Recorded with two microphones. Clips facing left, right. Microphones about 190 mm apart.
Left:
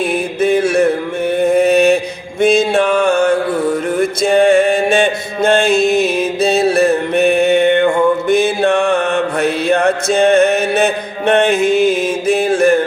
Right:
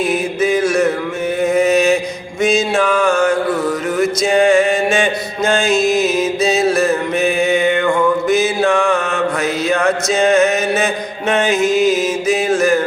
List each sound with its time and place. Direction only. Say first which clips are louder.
0.1 s mantra: left 2 dB; 55° left (ahead or behind)
3.1 s music: left 2 dB; 30° left (ahead or behind)
4.0 s music: left 1 dB; 55° left (ahead or behind)
6.7 s mantra: left 3 dB; 60° left (ahead or behind)